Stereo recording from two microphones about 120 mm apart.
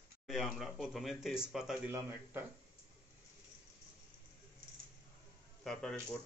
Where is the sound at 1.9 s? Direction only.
20° right (ahead or behind).